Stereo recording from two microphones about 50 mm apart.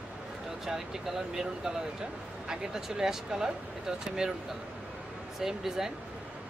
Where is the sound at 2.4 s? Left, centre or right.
Centre.